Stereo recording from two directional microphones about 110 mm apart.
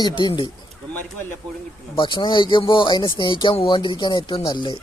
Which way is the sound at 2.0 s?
45° left (ahead or behind).